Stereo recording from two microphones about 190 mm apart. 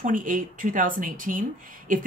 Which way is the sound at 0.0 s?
45° right (ahead or behind).